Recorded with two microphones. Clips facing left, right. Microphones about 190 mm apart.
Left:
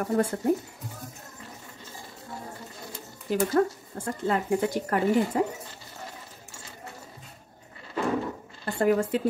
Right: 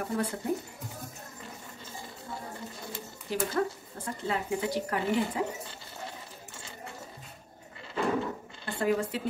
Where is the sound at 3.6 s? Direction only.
45° left (ahead or behind).